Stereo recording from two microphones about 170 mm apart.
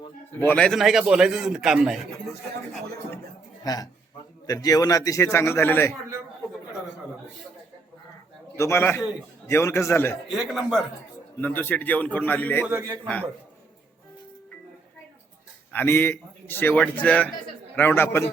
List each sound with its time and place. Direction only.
0.3 s a man's voice: 10° left (ahead or behind)
3.6 s a man's voice: 20° left (ahead or behind)
8.5 s a man's voice: 15° left (ahead or behind)
10.3 s a man's voice: 5° right (ahead or behind)
15.7 s a man's voice: 10° left (ahead or behind)